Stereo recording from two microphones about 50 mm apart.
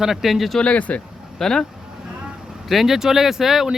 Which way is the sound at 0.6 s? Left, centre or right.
Left.